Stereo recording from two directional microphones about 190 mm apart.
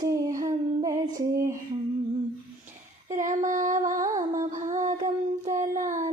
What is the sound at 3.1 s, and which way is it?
Female singing, 40° right (ahead or behind).